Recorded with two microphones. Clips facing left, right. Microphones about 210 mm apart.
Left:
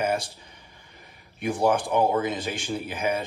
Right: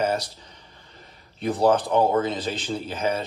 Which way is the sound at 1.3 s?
15° left (ahead or behind).